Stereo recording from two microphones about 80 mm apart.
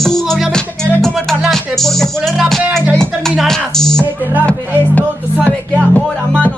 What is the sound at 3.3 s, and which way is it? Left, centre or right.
Speech, centre.